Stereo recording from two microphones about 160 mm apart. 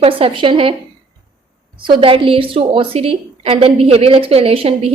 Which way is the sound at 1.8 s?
30° right (ahead or behind).